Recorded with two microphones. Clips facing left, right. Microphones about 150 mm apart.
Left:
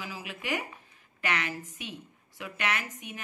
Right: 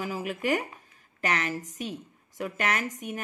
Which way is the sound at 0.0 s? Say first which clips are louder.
Right 9 dB; 45° right (ahead or behind).